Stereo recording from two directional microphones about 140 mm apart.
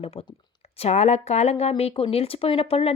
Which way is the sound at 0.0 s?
45° left (ahead or behind).